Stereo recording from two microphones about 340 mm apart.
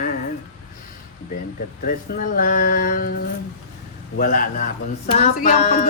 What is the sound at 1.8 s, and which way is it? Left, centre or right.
Speech, left.